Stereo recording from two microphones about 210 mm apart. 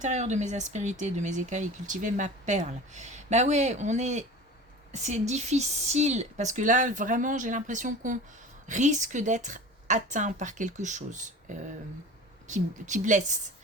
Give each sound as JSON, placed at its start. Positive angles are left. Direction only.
{"t": 0.0, "sound": "speech", "side_deg": -35}